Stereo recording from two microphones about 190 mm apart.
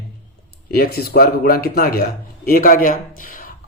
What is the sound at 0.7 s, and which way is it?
A man's voice, 55° left (ahead or behind).